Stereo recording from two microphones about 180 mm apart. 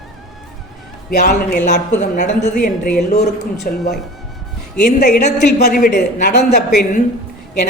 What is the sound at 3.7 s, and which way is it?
Speech, 50° left (ahead or behind).